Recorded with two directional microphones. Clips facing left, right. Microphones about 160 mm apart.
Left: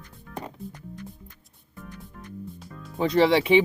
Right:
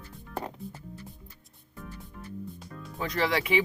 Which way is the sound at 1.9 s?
5° right (ahead or behind).